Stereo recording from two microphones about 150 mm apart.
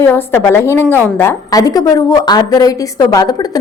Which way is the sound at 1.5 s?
25° left (ahead or behind).